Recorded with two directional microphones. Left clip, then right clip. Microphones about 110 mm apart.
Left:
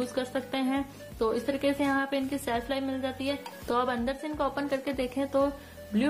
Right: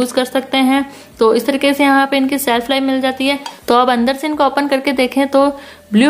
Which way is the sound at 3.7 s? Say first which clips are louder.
Right 17 dB; 25° right (ahead or behind).